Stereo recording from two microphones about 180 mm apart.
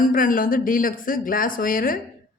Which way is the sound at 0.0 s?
50° left (ahead or behind).